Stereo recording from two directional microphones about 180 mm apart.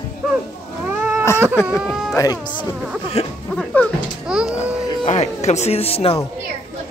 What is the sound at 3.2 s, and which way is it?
Speech, 35° left (ahead or behind).